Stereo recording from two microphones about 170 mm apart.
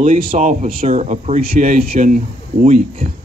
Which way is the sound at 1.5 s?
55° right (ahead or behind).